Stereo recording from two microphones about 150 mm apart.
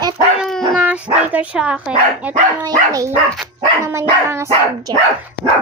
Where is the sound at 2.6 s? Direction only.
25° right (ahead or behind).